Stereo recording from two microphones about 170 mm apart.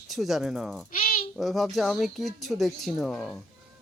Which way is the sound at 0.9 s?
55° left (ahead or behind).